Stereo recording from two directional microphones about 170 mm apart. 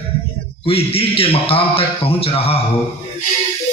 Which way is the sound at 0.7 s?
35° left (ahead or behind).